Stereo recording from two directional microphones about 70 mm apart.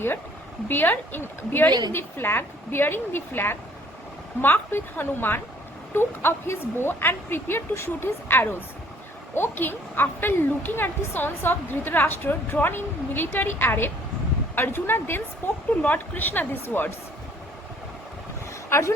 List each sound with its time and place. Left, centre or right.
0.7 s a woman's voice: left
18.7 s a woman's voice: left